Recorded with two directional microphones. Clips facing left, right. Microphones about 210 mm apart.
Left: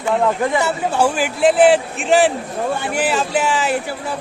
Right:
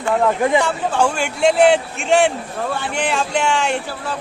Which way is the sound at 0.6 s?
5° left (ahead or behind).